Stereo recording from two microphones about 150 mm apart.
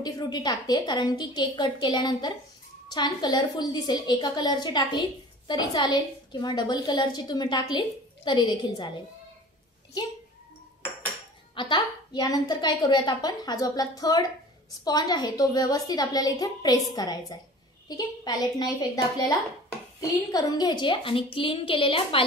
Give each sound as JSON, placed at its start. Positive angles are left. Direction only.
{"t": 0.0, "sound": "a woman's voice", "side_deg": 30}
{"t": 11.5, "sound": "a woman's voice", "side_deg": 30}